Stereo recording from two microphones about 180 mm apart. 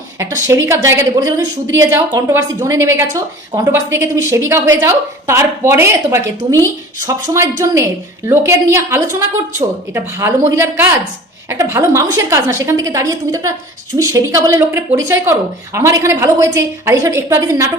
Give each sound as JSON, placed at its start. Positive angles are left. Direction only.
{"t": 0.4, "sound": "speech", "side_deg": -15}